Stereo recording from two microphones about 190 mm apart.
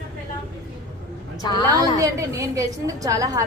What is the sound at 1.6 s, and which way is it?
A woman's voice, 15° right (ahead or behind).